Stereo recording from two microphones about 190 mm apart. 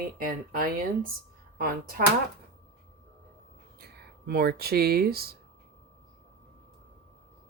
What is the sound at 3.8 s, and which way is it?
Speech, 55° right (ahead or behind).